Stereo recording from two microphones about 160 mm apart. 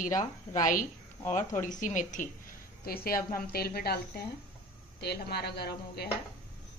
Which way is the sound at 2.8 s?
70° left (ahead or behind).